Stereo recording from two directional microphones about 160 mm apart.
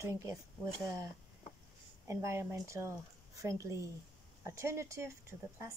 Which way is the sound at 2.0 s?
15° right (ahead or behind).